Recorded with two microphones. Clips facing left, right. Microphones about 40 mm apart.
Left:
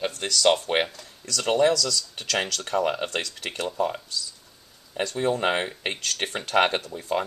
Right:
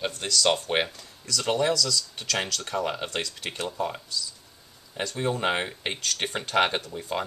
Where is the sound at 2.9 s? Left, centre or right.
Centre.